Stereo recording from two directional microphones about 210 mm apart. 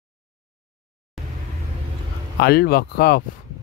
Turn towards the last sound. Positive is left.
turn(degrees=45)  # may be behind; listen again after turning